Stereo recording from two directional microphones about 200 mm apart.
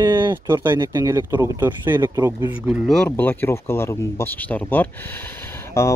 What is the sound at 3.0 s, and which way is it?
Speech, 10° left (ahead or behind).